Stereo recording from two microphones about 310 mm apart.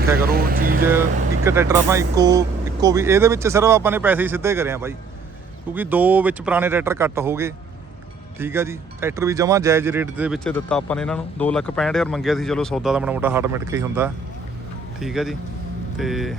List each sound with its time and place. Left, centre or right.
0.2 s speech: right
1.5 s speech: centre